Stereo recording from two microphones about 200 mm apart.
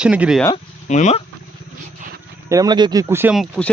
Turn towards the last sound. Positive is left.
turn(degrees=0)  # may be behind; listen again after turning